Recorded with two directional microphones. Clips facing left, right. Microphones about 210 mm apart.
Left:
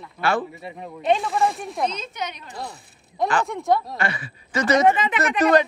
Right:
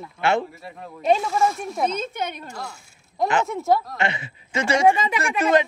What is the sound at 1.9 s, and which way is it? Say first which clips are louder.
Speech: right 4 dB; 50° right (ahead or behind).